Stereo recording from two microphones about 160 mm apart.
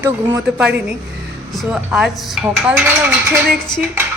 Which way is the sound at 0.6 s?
5° right (ahead or behind).